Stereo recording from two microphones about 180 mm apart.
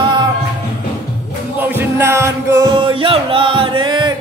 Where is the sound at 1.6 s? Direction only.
15° right (ahead or behind).